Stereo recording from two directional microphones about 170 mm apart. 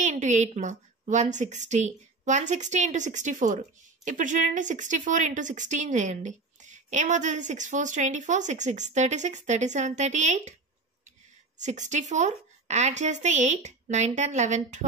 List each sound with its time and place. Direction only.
0.0 s a woman's voice: 45° right (ahead or behind)
11.5 s a woman's voice: 45° right (ahead or behind)